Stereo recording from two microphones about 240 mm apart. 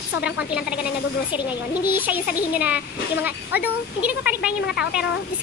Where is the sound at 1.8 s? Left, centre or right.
Centre.